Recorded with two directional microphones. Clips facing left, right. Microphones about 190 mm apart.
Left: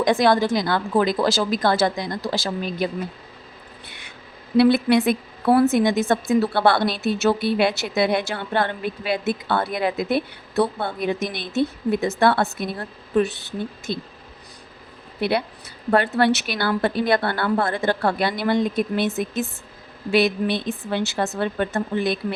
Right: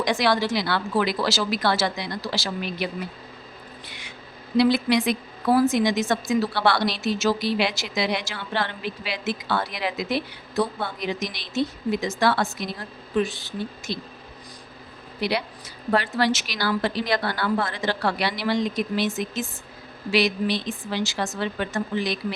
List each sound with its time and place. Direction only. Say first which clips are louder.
0.0 s a woman's voice: left 5 dB; 50° left (ahead or behind)
4.5 s a woman's voice: left 4 dB; 60° left (ahead or behind)
15.2 s a woman's voice: left 4 dB; 55° left (ahead or behind)